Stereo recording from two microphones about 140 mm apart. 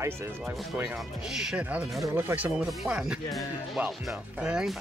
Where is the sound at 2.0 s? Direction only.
15° right (ahead or behind).